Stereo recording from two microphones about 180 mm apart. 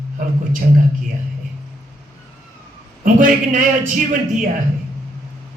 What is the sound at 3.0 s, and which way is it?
Speech, 45° right (ahead or behind).